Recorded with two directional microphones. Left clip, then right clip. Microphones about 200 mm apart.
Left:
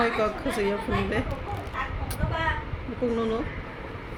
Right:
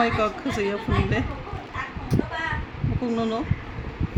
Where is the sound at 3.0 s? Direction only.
40° right (ahead or behind).